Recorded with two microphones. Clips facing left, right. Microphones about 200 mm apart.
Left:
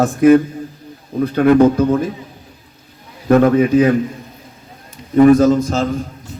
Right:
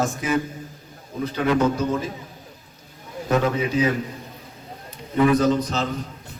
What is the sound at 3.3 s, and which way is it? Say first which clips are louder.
Speech: left 10 dB; 55° left (ahead or behind).